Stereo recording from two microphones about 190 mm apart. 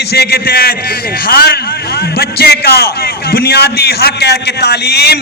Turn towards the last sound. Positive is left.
turn(degrees=60)  # may be behind; listen again after turning